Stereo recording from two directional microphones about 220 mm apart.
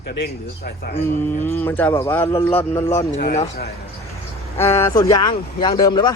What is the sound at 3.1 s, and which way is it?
Speech, 40° left (ahead or behind).